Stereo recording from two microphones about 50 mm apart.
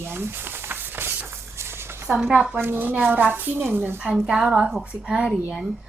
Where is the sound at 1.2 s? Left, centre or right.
Right.